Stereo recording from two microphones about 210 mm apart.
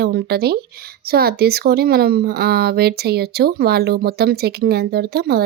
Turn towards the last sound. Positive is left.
turn(degrees=-50)  # may be behind; listen again after turning